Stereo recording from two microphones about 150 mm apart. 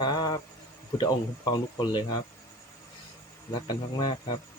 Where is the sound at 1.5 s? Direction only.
25° left (ahead or behind).